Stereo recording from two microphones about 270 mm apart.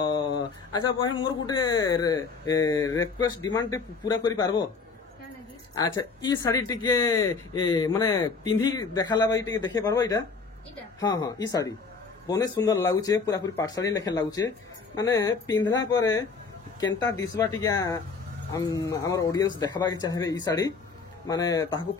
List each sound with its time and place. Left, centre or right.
0.0 s a sound: centre
1.4 s speech: centre
5.8 s speech: centre